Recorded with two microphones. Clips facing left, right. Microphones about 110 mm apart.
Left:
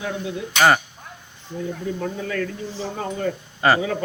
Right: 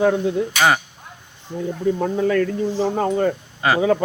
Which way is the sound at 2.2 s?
40° right (ahead or behind).